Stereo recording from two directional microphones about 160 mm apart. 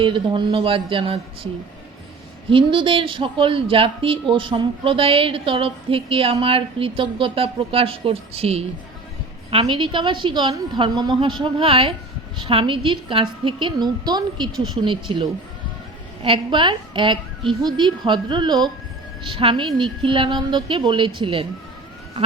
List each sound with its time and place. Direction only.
0.0 s speech: 30° right (ahead or behind)
2.5 s a woman's voice: 30° right (ahead or behind)